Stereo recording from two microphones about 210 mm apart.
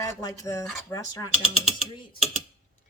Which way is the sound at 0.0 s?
15° left (ahead or behind).